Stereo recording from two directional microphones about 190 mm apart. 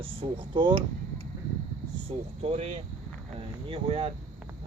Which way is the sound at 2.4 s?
30° right (ahead or behind).